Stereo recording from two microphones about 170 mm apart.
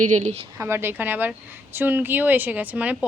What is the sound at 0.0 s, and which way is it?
Speech, 45° right (ahead or behind).